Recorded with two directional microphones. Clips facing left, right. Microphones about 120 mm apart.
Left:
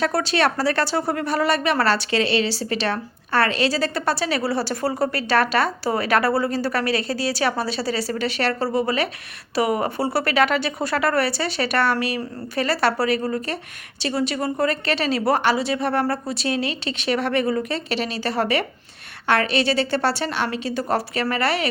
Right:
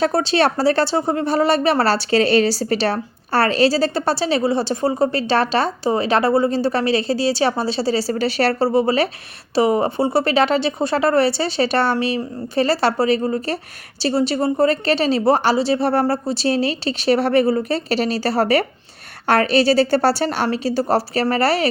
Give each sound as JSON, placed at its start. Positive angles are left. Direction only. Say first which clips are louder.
{"t": 0.0, "sound": "a woman's voice", "louder": "right 4 dB", "side_deg": -30}